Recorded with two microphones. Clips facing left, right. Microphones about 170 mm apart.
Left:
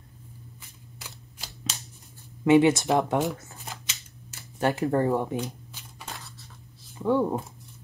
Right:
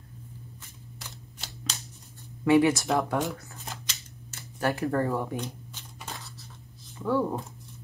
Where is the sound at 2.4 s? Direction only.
20° left (ahead or behind).